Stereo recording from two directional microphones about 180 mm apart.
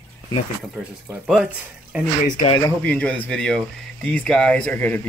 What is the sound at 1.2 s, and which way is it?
Speech, 5° right (ahead or behind).